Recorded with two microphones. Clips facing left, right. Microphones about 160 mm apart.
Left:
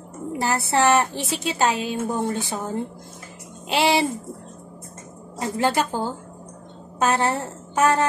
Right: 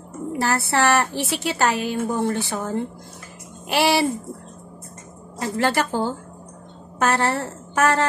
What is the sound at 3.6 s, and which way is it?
Speech, 20° left (ahead or behind).